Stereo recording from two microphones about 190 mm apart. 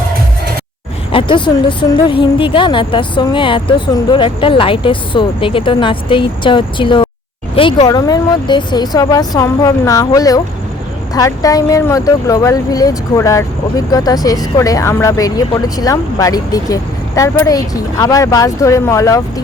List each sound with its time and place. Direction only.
1.1 s speech: 25° left (ahead or behind)